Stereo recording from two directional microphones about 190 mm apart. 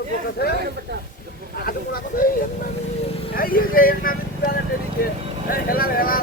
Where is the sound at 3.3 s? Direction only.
50° left (ahead or behind).